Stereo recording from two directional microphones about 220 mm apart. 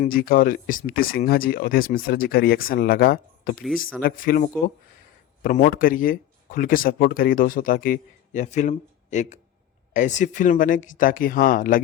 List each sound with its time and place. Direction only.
0.0 s speech: 40° left (ahead or behind)